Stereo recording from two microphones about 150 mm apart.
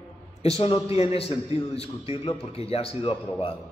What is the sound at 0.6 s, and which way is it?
A man's voice, 40° left (ahead or behind).